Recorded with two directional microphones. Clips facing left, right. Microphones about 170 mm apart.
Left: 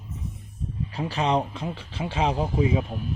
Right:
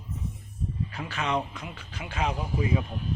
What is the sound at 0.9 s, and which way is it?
Speech, 35° left (ahead or behind).